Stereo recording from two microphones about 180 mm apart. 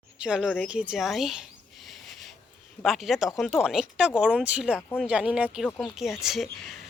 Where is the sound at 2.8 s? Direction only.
Centre (ahead or behind).